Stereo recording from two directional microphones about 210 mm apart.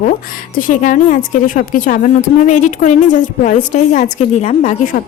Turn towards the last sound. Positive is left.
turn(degrees=35)  # may be behind; listen again after turning